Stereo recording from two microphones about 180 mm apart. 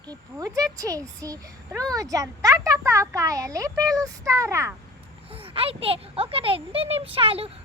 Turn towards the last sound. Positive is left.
turn(degrees=-30)  # may be behind; listen again after turning